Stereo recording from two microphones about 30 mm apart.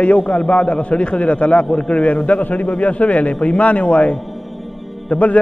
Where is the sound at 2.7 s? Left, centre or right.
Left.